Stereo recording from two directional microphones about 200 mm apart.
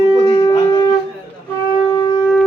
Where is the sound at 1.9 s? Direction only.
25° left (ahead or behind).